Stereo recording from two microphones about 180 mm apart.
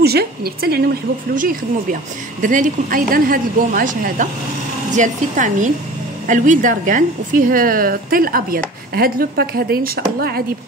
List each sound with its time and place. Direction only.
0.0 s a woman's voice: 60° right (ahead or behind)